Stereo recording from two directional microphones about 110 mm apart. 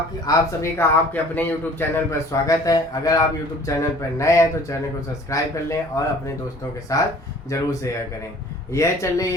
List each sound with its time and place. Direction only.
0.3 s speech: 25° left (ahead or behind)
6.9 s speech: 30° left (ahead or behind)